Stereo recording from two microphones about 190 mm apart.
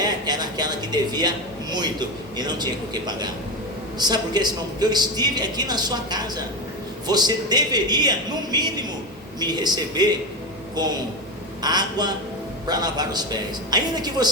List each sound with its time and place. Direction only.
0.0 s a sound: 20° right (ahead or behind)
1.7 s a man's voice: 20° right (ahead or behind)
11.6 s a man's voice: 20° right (ahead or behind)